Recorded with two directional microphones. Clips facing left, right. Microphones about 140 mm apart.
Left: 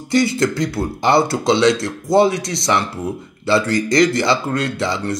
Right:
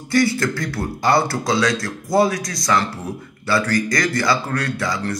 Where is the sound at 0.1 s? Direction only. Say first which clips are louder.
Left 2 dB; 20° left (ahead or behind).